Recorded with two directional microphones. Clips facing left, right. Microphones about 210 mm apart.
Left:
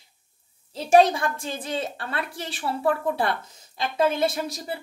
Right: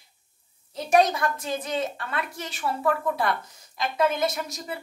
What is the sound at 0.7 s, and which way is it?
A woman's voice, 30° left (ahead or behind).